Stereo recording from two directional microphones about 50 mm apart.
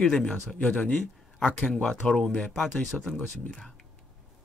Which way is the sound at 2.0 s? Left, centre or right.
Centre.